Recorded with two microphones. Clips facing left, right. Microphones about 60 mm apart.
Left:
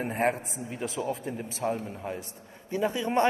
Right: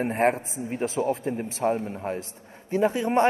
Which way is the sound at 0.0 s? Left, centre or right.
Right.